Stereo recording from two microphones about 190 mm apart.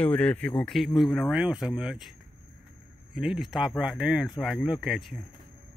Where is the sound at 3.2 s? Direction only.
Centre (ahead or behind).